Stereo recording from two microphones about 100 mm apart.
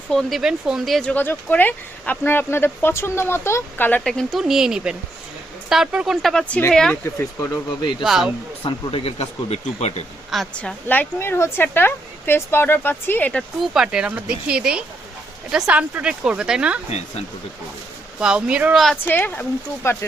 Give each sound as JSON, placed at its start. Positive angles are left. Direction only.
{"t": 0.1, "sound": "speech", "side_deg": 0}
{"t": 1.0, "sound": "speech", "side_deg": 20}
{"t": 4.0, "sound": "speech", "side_deg": 5}
{"t": 6.3, "sound": "speech", "side_deg": 10}
{"t": 6.9, "sound": "speech", "side_deg": 20}
{"t": 8.0, "sound": "speech", "side_deg": -5}
{"t": 8.6, "sound": "speech", "side_deg": 75}
{"t": 10.6, "sound": "speech", "side_deg": 15}
{"t": 13.7, "sound": "speech", "side_deg": -5}
{"t": 18.2, "sound": "speech", "side_deg": -10}
{"t": 19.0, "sound": "speech", "side_deg": 20}